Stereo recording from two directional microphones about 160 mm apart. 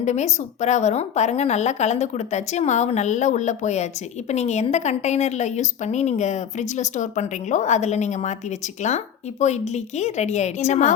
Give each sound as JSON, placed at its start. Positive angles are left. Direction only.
{"t": 0.0, "sound": "a woman's voice", "side_deg": 45}